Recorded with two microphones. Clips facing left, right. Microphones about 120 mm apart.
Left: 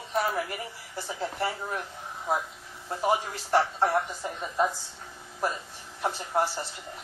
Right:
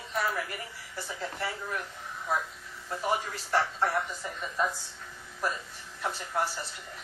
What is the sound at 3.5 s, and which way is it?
A woman's voice, 30° left (ahead or behind).